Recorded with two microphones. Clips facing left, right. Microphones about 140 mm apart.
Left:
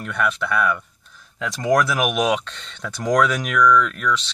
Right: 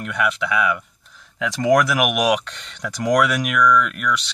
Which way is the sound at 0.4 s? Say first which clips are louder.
Even; 75° right (ahead or behind).